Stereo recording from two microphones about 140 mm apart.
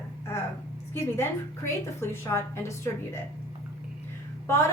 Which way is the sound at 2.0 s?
20° left (ahead or behind).